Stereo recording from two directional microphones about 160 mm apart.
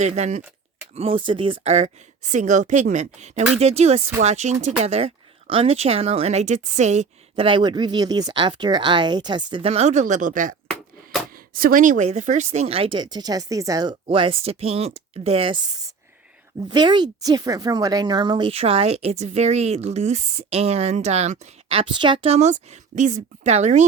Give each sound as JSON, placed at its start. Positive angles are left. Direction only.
{"t": 0.0, "sound": "speech", "side_deg": -45}
{"t": 0.9, "sound": "speech", "side_deg": -35}
{"t": 7.4, "sound": "speech", "side_deg": -30}
{"t": 11.5, "sound": "speech", "side_deg": -65}
{"t": 16.6, "sound": "speech", "side_deg": -30}